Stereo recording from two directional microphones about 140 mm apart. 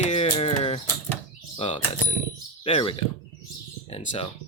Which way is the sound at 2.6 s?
40° left (ahead or behind).